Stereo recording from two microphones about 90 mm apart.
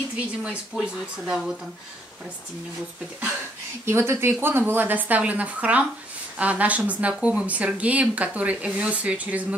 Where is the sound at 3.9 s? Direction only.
30° right (ahead or behind).